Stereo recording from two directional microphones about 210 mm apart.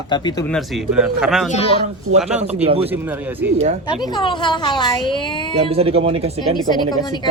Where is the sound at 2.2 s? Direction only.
5° right (ahead or behind).